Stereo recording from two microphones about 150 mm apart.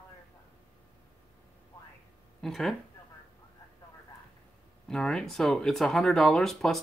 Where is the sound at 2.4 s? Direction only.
Centre (ahead or behind).